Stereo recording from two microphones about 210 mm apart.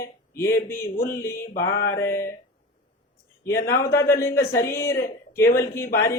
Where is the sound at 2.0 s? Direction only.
10° left (ahead or behind).